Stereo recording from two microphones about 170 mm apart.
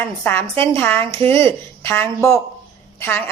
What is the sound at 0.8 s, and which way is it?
Speech, 10° left (ahead or behind).